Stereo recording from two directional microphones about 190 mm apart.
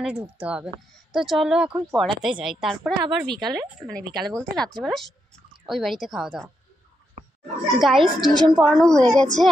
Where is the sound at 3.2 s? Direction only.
20° right (ahead or behind).